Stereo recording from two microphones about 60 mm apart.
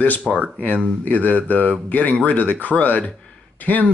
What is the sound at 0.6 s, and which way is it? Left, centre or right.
Speech, left.